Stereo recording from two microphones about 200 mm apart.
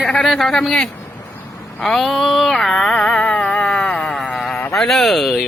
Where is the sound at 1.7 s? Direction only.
5° left (ahead or behind).